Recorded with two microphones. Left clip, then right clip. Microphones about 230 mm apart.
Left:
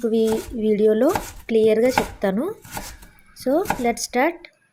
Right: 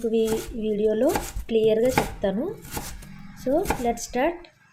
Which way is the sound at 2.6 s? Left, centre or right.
Centre.